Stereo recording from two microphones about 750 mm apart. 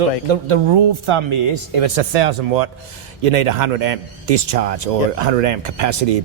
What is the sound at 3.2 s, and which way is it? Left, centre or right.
Speech, right.